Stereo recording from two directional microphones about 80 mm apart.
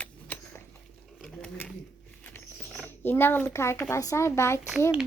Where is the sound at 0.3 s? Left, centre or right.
Left.